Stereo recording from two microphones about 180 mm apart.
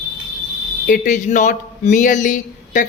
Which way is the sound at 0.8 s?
45° left (ahead or behind).